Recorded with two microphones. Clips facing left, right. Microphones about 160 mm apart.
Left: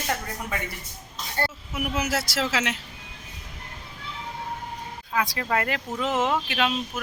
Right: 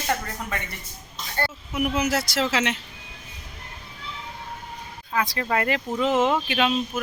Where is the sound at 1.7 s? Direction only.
5° left (ahead or behind).